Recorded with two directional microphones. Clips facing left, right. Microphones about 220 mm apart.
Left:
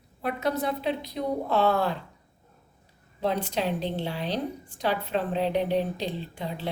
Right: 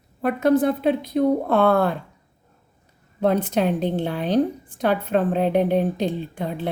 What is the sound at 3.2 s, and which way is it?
A woman's voice, 50° right (ahead or behind).